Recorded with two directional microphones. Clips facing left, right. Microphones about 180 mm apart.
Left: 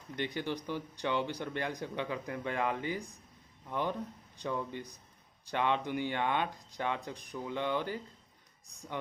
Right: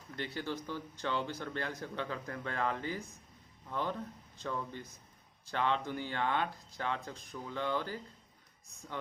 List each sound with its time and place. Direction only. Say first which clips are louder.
0.1 s speech: left 3 dB; 20° left (ahead or behind)